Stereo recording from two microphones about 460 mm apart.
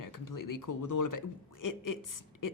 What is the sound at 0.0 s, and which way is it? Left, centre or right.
A man's voice, left.